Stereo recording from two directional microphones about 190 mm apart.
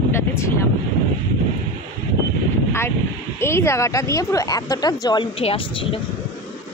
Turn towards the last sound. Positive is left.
turn(degrees=30)  # may be behind; listen again after turning